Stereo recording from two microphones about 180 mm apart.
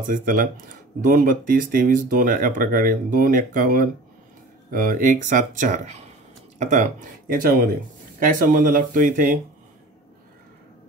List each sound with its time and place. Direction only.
0.0 s speech: 50° right (ahead or behind)